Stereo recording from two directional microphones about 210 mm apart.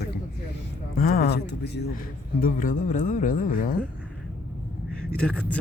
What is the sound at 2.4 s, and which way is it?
Speech, 40° left (ahead or behind).